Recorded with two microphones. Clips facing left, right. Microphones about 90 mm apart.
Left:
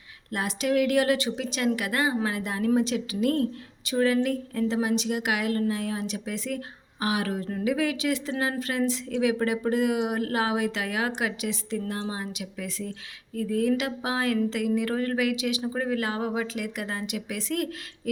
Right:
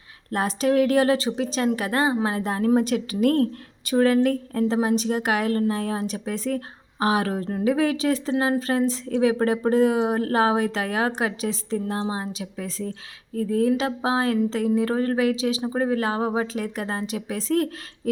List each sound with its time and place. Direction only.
0.3 s speech: 35° right (ahead or behind)